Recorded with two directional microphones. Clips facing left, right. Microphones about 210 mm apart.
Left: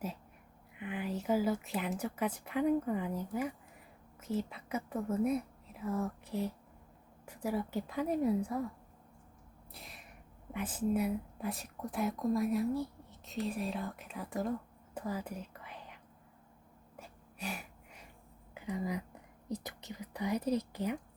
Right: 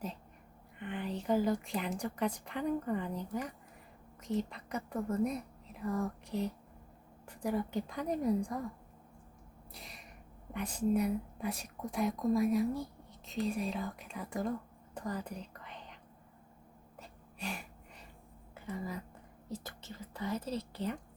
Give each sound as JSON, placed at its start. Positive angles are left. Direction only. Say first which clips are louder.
{"t": 0.8, "sound": "speech", "louder": "left 1 dB", "side_deg": 5}
{"t": 9.7, "sound": "a sound", "louder": "even", "side_deg": 0}
{"t": 10.5, "sound": "speech", "louder": "right 1 dB", "side_deg": 5}
{"t": 14.9, "sound": "whispering", "louder": "left 1 dB", "side_deg": 5}
{"t": 17.0, "sound": "a sound", "louder": "even", "side_deg": 5}
{"t": 18.5, "sound": "speech", "louder": "left 3 dB", "side_deg": 15}